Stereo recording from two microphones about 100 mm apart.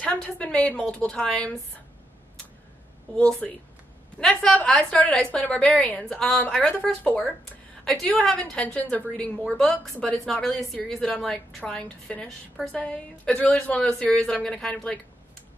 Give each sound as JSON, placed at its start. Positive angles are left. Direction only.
{"t": 0.0, "sound": "a woman's voice", "side_deg": 10}
{"t": 3.2, "sound": "a woman's voice", "side_deg": 10}
{"t": 6.7, "sound": "a woman's voice", "side_deg": 15}
{"t": 7.8, "sound": "a woman's voice", "side_deg": 5}
{"t": 8.4, "sound": "a woman's voice", "side_deg": 15}